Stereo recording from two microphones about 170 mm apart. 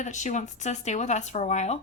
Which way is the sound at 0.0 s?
45° left (ahead or behind).